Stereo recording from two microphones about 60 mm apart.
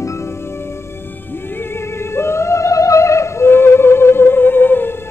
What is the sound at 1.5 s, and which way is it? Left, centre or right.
Music, left.